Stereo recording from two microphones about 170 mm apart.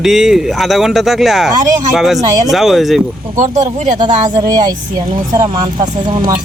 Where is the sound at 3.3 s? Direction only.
45° right (ahead or behind).